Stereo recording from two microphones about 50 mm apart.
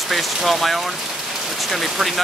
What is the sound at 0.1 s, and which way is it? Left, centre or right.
Speech, centre.